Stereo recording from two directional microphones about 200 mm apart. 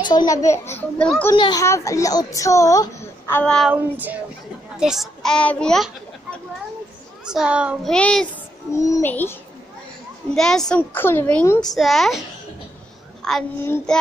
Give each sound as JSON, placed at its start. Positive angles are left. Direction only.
{"t": 0.0, "sound": "a child's voice", "side_deg": 20}
{"t": 1.3, "sound": "a child's voice", "side_deg": 20}
{"t": 3.7, "sound": "a child's voice", "side_deg": -10}
{"t": 7.2, "sound": "a child's voice", "side_deg": -5}
{"t": 8.7, "sound": "a child's voice", "side_deg": 15}
{"t": 11.7, "sound": "a child's voice", "side_deg": 0}
{"t": 13.2, "sound": "a child's voice", "side_deg": 5}